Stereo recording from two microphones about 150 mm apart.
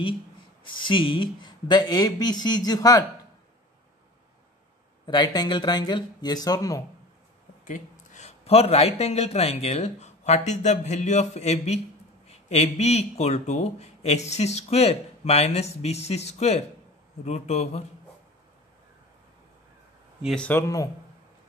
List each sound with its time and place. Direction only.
0.7 s speech: 35° left (ahead or behind)
5.0 s speech: 30° left (ahead or behind)
7.6 s speech: 55° left (ahead or behind)
20.2 s speech: 5° left (ahead or behind)
20.6 s speech: 25° left (ahead or behind)